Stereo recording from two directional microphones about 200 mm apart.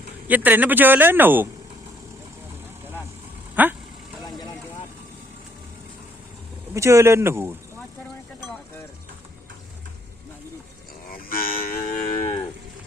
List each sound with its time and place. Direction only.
0.3 s speech: 10° right (ahead or behind)
3.5 s speech: 10° right (ahead or behind)
4.2 s vehicle: 20° left (ahead or behind)
6.7 s speech: 15° right (ahead or behind)
11.1 s cattle: 45° left (ahead or behind)